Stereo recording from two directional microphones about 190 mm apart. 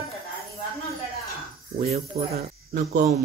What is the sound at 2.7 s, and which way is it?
Speech, 40° right (ahead or behind).